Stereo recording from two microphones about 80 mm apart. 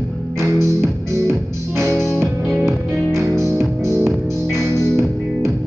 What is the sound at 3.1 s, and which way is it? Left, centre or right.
Music, right.